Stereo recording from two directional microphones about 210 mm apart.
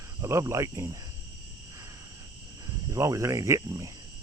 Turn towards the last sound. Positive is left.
turn(degrees=-15)  # may be behind; listen again after turning